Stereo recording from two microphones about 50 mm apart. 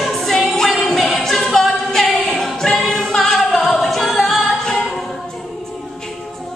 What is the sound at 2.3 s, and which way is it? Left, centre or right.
A capella, centre.